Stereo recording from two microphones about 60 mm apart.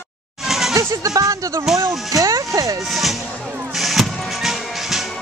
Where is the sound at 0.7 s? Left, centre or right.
Right.